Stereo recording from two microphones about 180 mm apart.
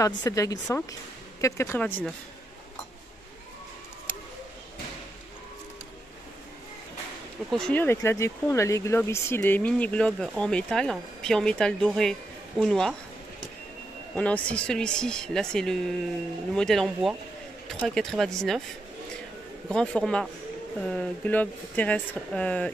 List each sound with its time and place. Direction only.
0.0 s speech: 20° left (ahead or behind)
7.5 s speech: 5° left (ahead or behind)
14.1 s speech: 5° left (ahead or behind)
19.7 s speech: 5° left (ahead or behind)